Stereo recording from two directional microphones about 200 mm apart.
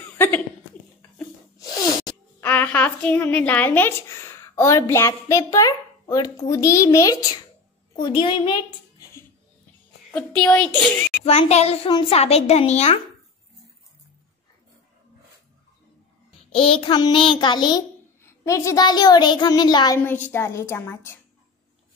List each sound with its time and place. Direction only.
2.4 s a woman's voice: 10° left (ahead or behind)
10.1 s a woman's voice: 5° left (ahead or behind)
11.2 s a woman's voice: 30° left (ahead or behind)
16.3 s a child's voice: 25° left (ahead or behind); by 21.2 s 10° left (ahead or behind)